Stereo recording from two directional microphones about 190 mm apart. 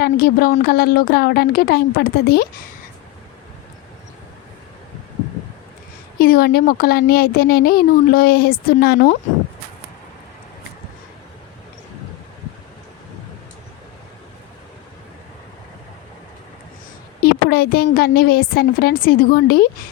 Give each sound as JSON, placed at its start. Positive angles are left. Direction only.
{"t": 0.0, "sound": "a woman's voice", "side_deg": 50}
{"t": 6.1, "sound": "speech", "side_deg": 50}
{"t": 17.2, "sound": "speech", "side_deg": 55}